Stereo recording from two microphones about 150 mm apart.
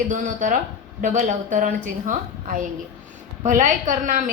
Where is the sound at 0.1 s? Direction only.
60° right (ahead or behind).